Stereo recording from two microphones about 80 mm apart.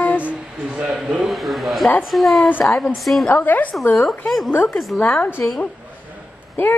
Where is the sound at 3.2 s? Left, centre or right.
Left.